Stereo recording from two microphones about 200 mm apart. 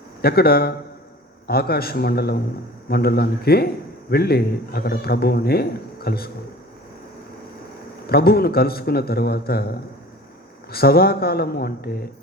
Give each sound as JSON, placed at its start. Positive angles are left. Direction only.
{"t": 0.2, "sound": "a man's voice", "side_deg": 50}
{"t": 8.0, "sound": "a man's voice", "side_deg": 50}